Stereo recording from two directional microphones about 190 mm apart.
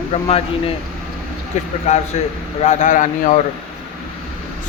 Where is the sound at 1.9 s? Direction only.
35° left (ahead or behind).